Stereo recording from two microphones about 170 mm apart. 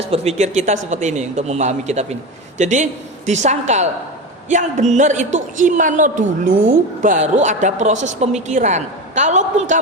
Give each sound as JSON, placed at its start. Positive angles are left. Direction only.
{"t": 0.0, "sound": "a woman's voice", "side_deg": -35}